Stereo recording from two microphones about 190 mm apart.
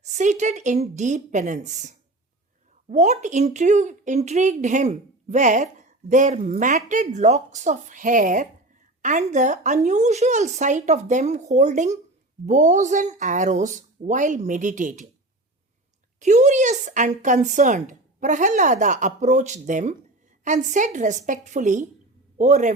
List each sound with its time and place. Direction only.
0.0 s speech: 40° right (ahead or behind)
16.2 s speech: 40° right (ahead or behind)